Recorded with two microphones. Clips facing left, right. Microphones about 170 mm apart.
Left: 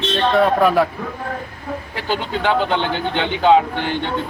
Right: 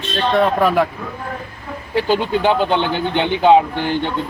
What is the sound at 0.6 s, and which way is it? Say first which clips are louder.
Speech: even; centre (ahead or behind).